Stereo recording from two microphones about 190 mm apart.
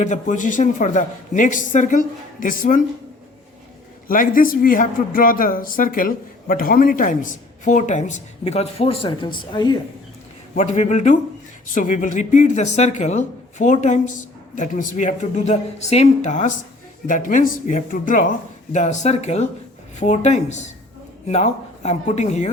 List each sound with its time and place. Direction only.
0.0 s speech: 40° left (ahead or behind)
4.1 s speech: 45° left (ahead or behind); by 9.7 s 25° left (ahead or behind)
10.5 s speech: 40° left (ahead or behind)